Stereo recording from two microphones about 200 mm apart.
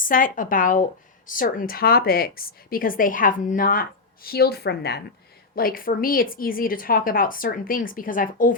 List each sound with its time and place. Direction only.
0.0 s a woman's voice: 45° left (ahead or behind)